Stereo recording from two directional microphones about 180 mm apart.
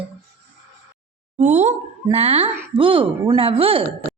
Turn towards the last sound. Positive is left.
turn(degrees=-30)  # may be behind; listen again after turning